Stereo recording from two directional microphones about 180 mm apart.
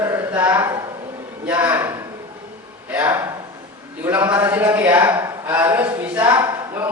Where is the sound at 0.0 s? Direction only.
10° right (ahead or behind).